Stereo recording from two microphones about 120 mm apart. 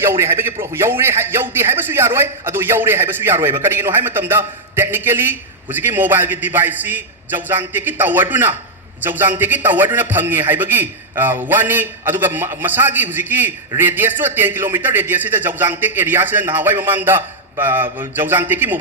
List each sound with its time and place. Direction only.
0.0 s a man's voice: 20° right (ahead or behind)